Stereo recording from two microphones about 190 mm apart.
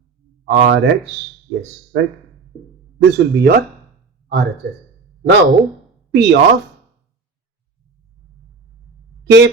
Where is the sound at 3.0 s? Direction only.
60° right (ahead or behind).